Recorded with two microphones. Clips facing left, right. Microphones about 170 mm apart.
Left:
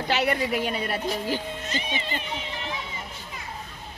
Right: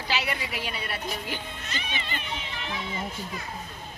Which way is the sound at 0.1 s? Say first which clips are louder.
Left 7 dB; 50° left (ahead or behind).